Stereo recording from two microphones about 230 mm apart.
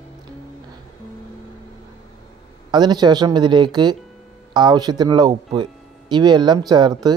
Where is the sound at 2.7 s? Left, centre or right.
Centre.